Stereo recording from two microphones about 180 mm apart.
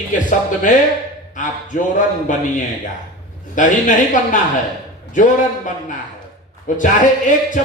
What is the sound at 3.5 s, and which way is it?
Speech, 45° left (ahead or behind).